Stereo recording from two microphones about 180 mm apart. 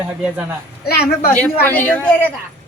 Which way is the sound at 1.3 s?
10° left (ahead or behind).